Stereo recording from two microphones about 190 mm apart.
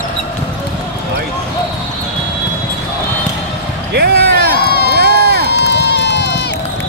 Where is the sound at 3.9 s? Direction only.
60° right (ahead or behind).